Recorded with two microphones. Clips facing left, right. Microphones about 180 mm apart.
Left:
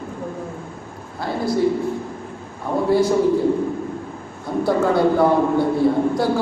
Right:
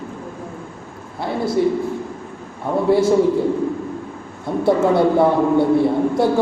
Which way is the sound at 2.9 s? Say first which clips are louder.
Right 2 dB; 25° right (ahead or behind).